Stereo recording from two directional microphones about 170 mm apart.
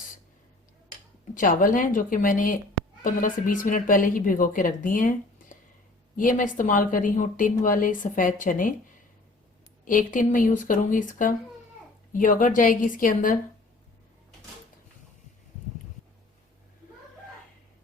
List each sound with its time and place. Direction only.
1.3 s a woman's voice: 55° left (ahead or behind)
9.8 s a woman's voice: 50° left (ahead or behind)